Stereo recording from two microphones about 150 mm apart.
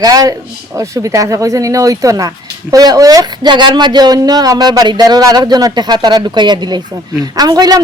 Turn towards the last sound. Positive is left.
turn(degrees=-25)  # may be behind; listen again after turning